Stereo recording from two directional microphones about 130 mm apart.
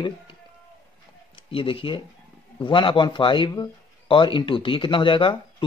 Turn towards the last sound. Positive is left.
turn(degrees=40)  # may be behind; listen again after turning